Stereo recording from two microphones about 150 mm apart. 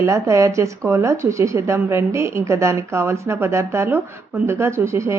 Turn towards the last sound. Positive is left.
turn(degrees=-20)  # may be behind; listen again after turning